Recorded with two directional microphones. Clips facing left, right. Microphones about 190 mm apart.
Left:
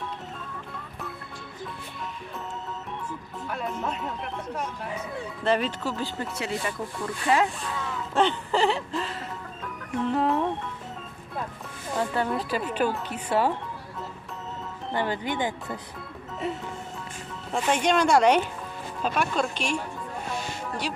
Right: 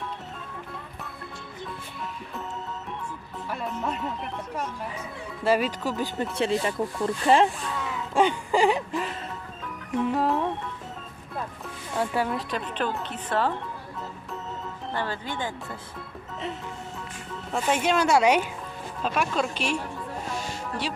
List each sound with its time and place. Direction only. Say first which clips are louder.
3.5 s speech: even; centre (ahead or behind); by 6.2 s 15° right (ahead or behind)
6.3 s speech: right 5 dB; 30° right (ahead or behind)
7.8 s a sound: right 1 dB; 10° right (ahead or behind)
10.0 s speech: even; 5° right (ahead or behind)
11.9 s speech: even; 10° right (ahead or behind); by 13.5 s 10° left (ahead or behind)
14.9 s speech: left 4 dB; 15° left (ahead or behind)
17.5 s speech: left 1 dB; 5° right (ahead or behind)